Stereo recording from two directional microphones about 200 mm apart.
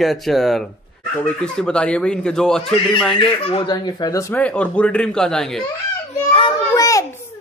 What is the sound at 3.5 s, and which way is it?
Speech, 25° left (ahead or behind).